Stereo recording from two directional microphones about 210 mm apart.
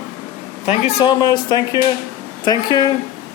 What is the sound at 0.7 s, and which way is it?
A man's voice, 25° left (ahead or behind).